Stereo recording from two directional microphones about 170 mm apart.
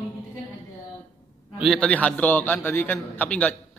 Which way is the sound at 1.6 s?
5° left (ahead or behind).